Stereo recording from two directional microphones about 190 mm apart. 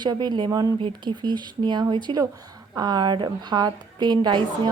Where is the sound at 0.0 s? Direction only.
25° right (ahead or behind).